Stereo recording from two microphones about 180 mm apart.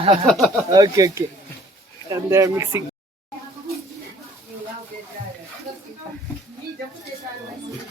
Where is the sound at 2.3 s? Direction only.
15° right (ahead or behind).